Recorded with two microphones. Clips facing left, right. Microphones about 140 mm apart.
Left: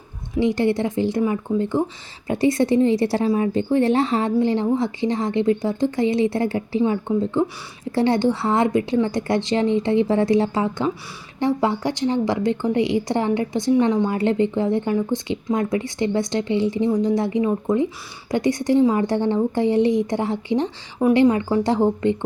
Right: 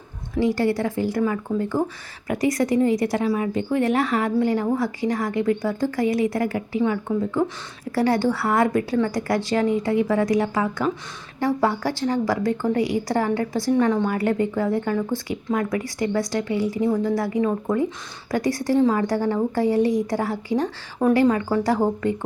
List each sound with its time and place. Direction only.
0.3 s a woman's voice: 20° left (ahead or behind)